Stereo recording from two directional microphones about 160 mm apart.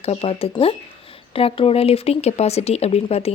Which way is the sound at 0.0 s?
40° left (ahead or behind).